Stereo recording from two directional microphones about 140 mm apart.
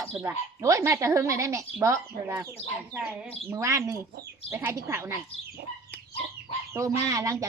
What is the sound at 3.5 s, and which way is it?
Speech, 20° right (ahead or behind).